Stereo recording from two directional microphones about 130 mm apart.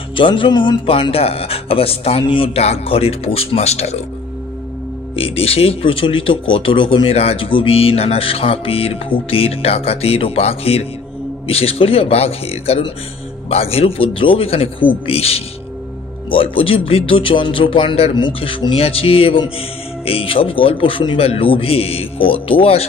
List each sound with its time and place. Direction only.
0.1 s speech: 40° left (ahead or behind); by 4.0 s 55° left (ahead or behind)
5.1 s speech: 45° left (ahead or behind)